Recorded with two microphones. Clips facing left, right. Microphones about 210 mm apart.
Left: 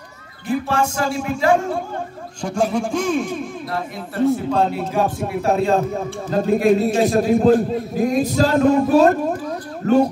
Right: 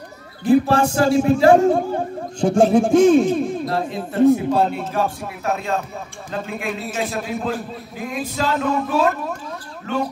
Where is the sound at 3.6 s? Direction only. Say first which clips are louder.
Right 4 dB; 25° right (ahead or behind).